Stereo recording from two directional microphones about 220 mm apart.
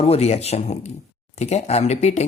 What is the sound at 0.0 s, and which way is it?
Speech, 30° left (ahead or behind).